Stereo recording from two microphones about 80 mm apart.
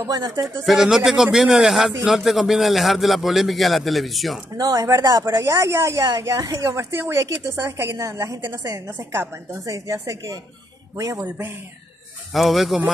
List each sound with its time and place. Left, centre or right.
0.0 s speech: right
0.7 s a man's voice: centre
4.6 s a woman's voice: right
6.0 s a woman's voice: right
8.9 s a woman's voice: right
9.5 s a woman's voice: right
11.1 s a woman's voice: right
12.3 s a man's voice: centre